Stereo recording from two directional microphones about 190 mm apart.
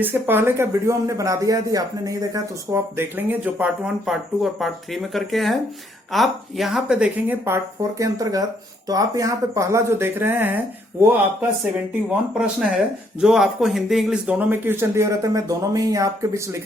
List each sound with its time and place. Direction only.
0.0 s speech: 10° right (ahead or behind)
12.0 s speech: 5° right (ahead or behind)